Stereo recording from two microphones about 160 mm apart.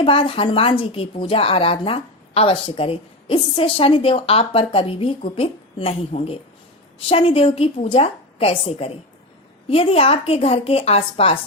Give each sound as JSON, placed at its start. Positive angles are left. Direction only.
{"t": 0.0, "sound": "a woman's voice", "side_deg": 35}